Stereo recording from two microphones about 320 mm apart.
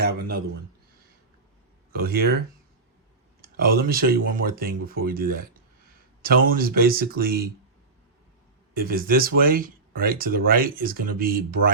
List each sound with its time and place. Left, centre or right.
0.0 s speech: right
1.9 s speech: right
3.4 s speech: right
6.6 s speech: right
8.7 s speech: right